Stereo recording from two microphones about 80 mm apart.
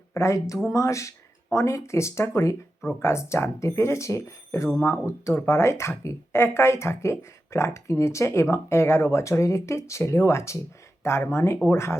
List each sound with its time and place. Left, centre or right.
0.1 s speech: left